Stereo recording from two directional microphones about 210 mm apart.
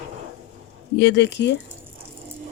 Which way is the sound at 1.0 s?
55° left (ahead or behind).